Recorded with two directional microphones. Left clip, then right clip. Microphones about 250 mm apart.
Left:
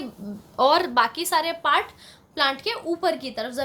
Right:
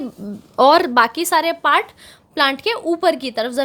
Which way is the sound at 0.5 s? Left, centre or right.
Right.